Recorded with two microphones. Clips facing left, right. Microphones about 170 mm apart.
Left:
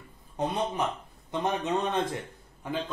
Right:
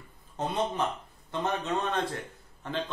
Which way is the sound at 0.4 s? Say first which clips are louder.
Left 1 dB; 15° left (ahead or behind).